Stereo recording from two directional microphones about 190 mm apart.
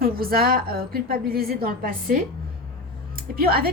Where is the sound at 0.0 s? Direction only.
50° right (ahead or behind).